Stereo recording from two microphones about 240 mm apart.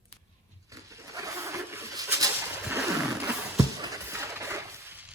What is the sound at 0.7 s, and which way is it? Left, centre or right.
Goat, centre.